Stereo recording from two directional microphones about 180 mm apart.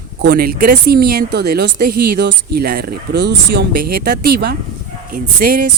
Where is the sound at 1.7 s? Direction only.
55° right (ahead or behind).